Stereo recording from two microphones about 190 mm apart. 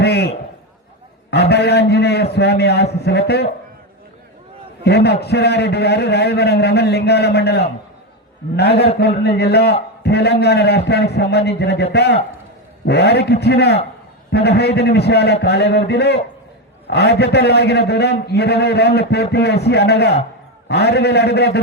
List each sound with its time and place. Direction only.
0.0 s a sound: 55° left (ahead or behind)
1.3 s a man's voice: 60° left (ahead or behind)
4.8 s a man's voice: 60° left (ahead or behind)
8.7 s a man's voice: 30° left (ahead or behind)
9.4 s a man's voice: 60° left (ahead or behind)